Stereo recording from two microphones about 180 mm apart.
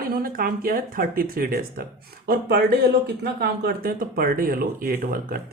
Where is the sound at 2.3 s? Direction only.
70° right (ahead or behind).